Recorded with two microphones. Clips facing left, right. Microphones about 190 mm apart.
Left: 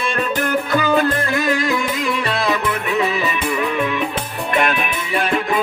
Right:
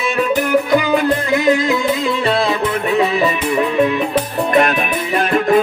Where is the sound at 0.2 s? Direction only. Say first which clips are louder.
Right 6 dB; 10° right (ahead or behind).